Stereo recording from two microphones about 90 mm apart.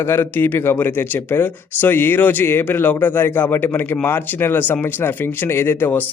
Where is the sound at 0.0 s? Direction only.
25° left (ahead or behind).